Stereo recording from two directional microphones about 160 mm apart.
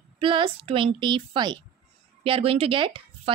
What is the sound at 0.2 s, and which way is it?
Speech, 35° right (ahead or behind).